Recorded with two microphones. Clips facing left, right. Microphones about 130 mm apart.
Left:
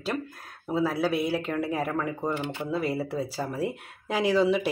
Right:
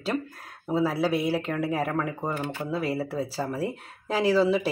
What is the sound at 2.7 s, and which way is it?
Speech, 5° right (ahead or behind).